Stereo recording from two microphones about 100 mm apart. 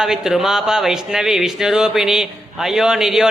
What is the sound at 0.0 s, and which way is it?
Speech, 5° right (ahead or behind).